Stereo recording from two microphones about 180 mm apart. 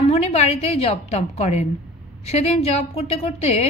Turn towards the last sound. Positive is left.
turn(degrees=35)  # may be behind; listen again after turning